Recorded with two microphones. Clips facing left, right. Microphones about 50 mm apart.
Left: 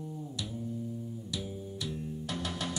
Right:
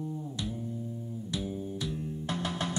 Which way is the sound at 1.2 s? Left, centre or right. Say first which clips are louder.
Right 8 dB; right.